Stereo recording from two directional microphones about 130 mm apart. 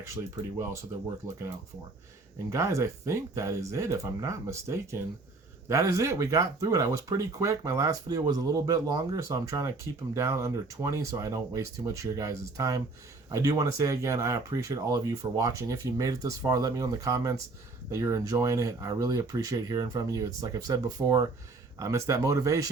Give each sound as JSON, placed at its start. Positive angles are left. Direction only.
{"t": 2.5, "sound": "speech", "side_deg": -20}